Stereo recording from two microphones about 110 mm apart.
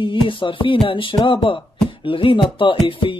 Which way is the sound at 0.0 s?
50° left (ahead or behind).